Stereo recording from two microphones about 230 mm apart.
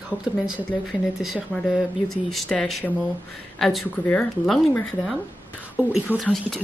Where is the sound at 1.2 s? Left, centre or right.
Centre.